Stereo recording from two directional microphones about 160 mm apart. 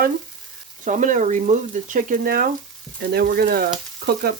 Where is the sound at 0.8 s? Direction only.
50° right (ahead or behind); by 3.6 s 70° right (ahead or behind).